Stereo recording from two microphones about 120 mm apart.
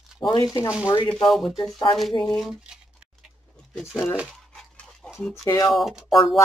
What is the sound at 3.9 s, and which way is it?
Speech, 25° left (ahead or behind).